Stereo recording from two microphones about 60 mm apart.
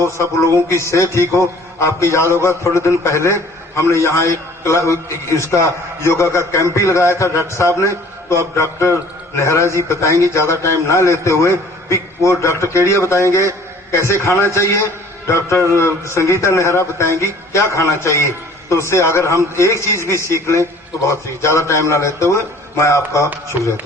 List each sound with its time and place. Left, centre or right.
0.0 s a man's voice: left
9.4 s a man's voice: left